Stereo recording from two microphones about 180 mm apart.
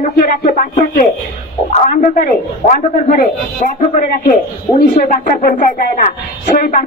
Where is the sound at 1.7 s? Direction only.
40° left (ahead or behind).